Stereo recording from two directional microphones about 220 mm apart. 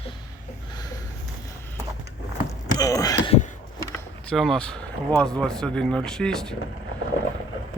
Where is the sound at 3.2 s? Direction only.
25° left (ahead or behind).